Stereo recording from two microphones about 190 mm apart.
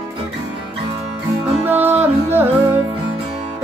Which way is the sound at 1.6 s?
10° right (ahead or behind).